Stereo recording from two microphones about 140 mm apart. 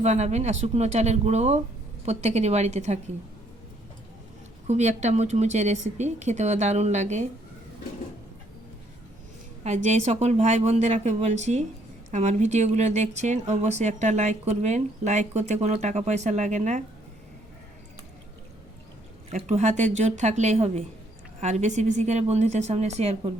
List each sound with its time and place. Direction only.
0.0 s speech: 50° right (ahead or behind)
4.6 s speech: 55° right (ahead or behind)
9.6 s speech: 55° right (ahead or behind)
19.3 s speech: 55° right (ahead or behind)